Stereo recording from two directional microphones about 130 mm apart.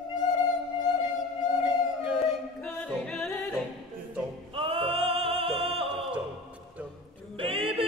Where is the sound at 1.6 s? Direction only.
10° right (ahead or behind).